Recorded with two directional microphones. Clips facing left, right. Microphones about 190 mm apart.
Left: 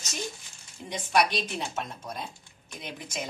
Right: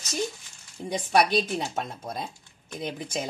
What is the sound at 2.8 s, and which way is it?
Speech, 30° right (ahead or behind).